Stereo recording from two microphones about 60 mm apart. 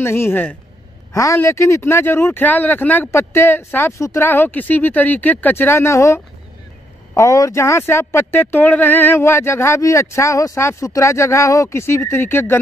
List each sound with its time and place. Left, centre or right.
0.0 s speech: left
1.1 s speech: left
2.4 s speech: left
9.8 s speech: left
11.8 s speech: left